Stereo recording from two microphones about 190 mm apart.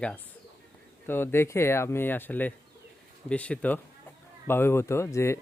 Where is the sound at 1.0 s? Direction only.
10° left (ahead or behind).